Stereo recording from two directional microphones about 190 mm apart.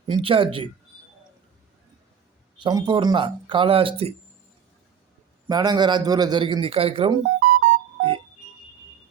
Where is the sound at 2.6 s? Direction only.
25° right (ahead or behind).